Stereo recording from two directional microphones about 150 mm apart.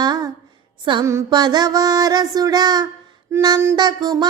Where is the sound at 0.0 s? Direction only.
25° right (ahead or behind).